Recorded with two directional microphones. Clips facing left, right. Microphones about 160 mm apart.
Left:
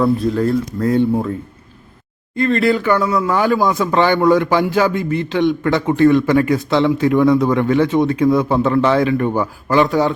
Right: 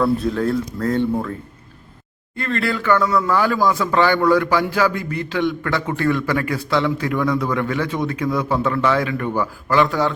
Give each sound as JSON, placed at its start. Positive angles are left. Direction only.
{"t": 0.0, "sound": "speech", "side_deg": 0}
{"t": 2.3, "sound": "a man's voice", "side_deg": 20}